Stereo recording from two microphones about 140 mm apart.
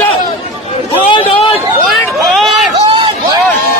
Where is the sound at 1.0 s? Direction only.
35° left (ahead or behind).